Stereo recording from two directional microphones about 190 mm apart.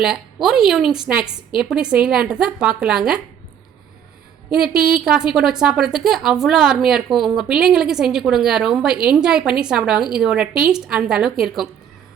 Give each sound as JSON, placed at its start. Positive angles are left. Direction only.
{"t": 0.0, "sound": "a woman's voice", "side_deg": 0}
{"t": 4.4, "sound": "speech", "side_deg": -5}
{"t": 4.7, "sound": "a woman's voice", "side_deg": -55}
{"t": 5.0, "sound": "a woman's voice", "side_deg": -5}